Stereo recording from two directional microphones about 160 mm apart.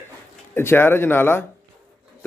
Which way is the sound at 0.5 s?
15° left (ahead or behind).